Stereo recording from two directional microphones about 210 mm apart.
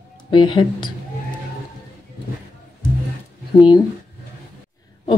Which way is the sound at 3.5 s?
20° left (ahead or behind).